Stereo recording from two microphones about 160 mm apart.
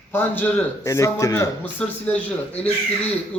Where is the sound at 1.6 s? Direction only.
10° left (ahead or behind).